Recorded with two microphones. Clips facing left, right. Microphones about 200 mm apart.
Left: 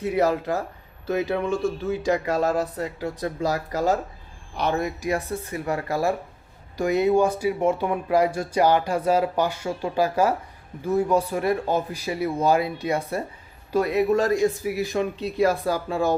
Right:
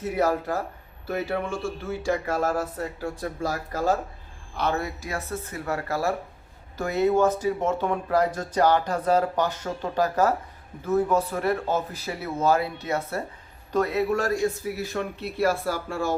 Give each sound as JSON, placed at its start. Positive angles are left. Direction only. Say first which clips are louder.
{"t": 0.0, "sound": "speech", "louder": "left 2 dB", "side_deg": 15}